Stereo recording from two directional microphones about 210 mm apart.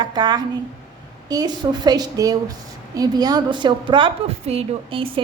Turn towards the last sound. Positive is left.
turn(degrees=-25)  # may be behind; listen again after turning